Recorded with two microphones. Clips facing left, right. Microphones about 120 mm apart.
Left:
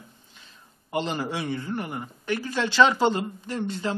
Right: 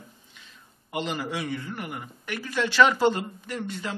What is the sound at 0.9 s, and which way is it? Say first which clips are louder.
A man's voice: left 2 dB; 30° left (ahead or behind).